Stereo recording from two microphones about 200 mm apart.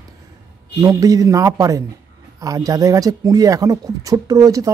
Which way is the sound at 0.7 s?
20° right (ahead or behind).